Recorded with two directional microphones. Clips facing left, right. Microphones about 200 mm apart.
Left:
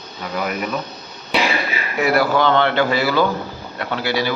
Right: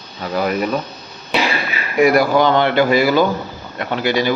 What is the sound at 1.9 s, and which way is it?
A man's voice, 15° right (ahead or behind).